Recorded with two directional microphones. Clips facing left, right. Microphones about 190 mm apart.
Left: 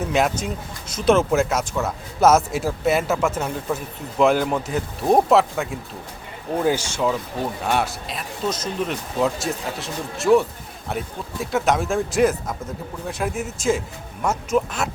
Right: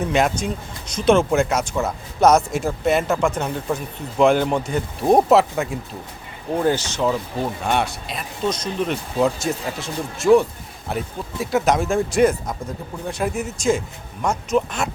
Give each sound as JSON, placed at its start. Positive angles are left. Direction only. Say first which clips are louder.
{"t": 0.0, "sound": "speech", "louder": "right 1 dB", "side_deg": 5}
{"t": 6.6, "sound": "speech", "louder": "right 1 dB", "side_deg": 10}